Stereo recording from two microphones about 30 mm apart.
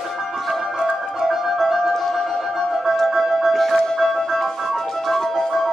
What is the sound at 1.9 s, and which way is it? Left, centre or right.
Music, centre.